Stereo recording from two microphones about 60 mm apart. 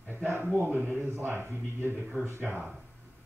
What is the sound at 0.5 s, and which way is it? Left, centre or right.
Speech, right.